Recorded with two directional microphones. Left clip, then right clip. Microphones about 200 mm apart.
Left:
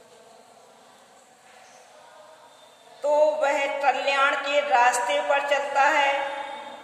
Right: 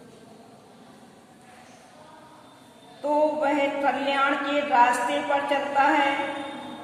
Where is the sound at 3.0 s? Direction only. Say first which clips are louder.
Left 2 dB; 35° left (ahead or behind).